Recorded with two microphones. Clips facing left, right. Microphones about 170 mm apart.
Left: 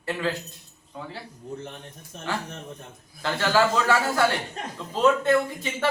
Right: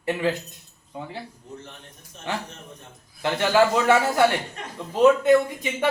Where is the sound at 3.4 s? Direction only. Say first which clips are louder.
Right 3 dB; 20° right (ahead or behind).